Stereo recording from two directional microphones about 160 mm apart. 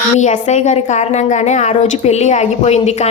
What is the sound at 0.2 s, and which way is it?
A woman's voice, 50° left (ahead or behind).